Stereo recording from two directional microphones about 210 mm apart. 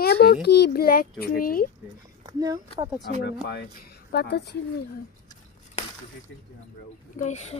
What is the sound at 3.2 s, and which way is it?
Speech, 50° left (ahead or behind).